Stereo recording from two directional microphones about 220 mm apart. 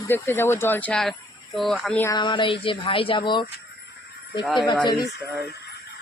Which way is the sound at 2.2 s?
20° left (ahead or behind).